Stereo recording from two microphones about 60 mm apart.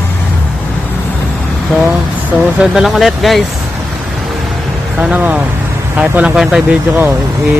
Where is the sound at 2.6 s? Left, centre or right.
Centre.